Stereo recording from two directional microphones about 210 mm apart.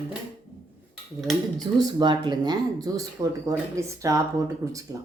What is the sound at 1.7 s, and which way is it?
Speech, 20° right (ahead or behind).